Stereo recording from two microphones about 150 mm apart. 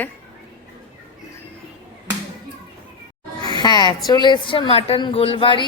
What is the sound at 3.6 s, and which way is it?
A woman's voice, 30° left (ahead or behind).